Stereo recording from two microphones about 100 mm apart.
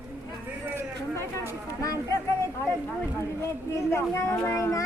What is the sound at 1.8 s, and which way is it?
Speech, 35° left (ahead or behind).